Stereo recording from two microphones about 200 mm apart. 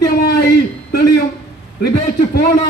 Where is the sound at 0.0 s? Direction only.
50° left (ahead or behind).